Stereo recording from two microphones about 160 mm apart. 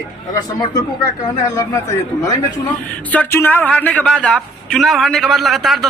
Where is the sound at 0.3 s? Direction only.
25° left (ahead or behind).